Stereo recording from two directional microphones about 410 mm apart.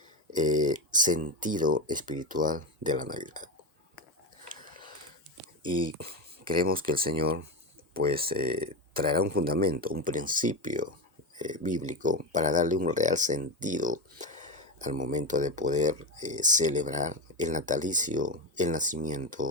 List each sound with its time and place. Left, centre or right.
0.3 s speech: centre
4.4 s dog: centre
5.6 s speech: centre